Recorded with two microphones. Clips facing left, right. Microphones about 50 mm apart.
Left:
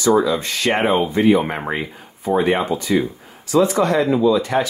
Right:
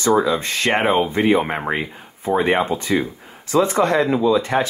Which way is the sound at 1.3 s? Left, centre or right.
Right.